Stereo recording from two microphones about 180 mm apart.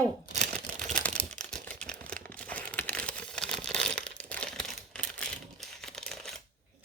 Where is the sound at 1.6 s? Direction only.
5° left (ahead or behind).